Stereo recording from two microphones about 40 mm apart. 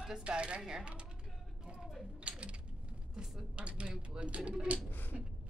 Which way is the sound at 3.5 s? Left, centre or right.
Right.